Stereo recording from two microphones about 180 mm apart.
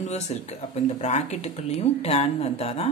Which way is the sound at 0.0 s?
40° left (ahead or behind).